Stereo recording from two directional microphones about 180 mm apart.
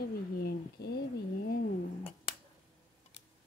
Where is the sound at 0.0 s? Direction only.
60° left (ahead or behind).